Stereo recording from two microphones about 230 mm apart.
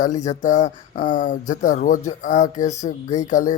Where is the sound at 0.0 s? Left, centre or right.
Left.